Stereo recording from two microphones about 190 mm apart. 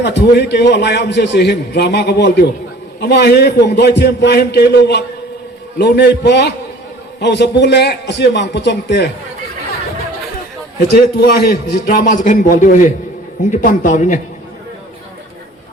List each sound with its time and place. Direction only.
0.0 s a man's voice: 65° left (ahead or behind)
10.9 s a man's voice: 55° left (ahead or behind)